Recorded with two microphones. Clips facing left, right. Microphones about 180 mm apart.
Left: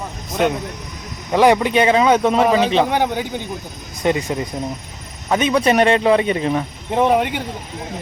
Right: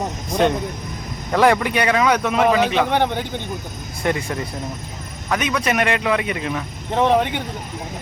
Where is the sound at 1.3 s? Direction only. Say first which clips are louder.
Left 3 dB; 15° left (ahead or behind).